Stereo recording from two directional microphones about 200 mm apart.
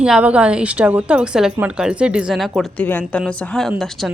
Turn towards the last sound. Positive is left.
turn(degrees=0)  # may be behind; listen again after turning